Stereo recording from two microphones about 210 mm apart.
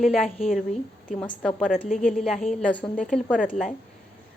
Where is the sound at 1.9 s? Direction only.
35° left (ahead or behind).